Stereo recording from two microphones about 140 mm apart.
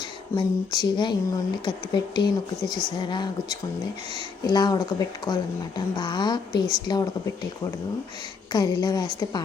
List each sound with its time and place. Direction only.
0.3 s speech: 30° left (ahead or behind)
8.5 s speech: 30° left (ahead or behind)